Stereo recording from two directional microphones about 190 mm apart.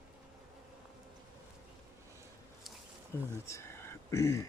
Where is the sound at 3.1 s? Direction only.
15° left (ahead or behind).